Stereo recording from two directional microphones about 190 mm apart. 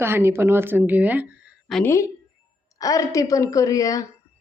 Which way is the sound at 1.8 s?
15° left (ahead or behind).